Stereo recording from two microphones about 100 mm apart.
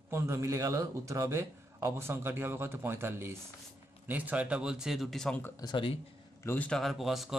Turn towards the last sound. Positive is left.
turn(degrees=0)  # may be behind; listen again after turning